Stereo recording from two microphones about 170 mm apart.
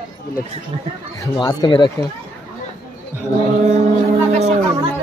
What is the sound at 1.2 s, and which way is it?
Speech, 25° left (ahead or behind).